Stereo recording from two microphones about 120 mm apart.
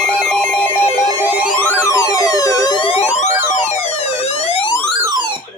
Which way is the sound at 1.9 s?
25° left (ahead or behind).